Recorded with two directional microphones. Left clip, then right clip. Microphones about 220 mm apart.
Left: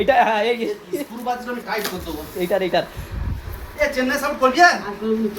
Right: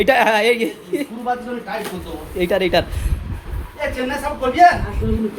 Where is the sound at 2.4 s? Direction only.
40° right (ahead or behind).